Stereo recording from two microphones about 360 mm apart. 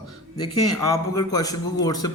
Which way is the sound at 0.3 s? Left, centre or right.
Left.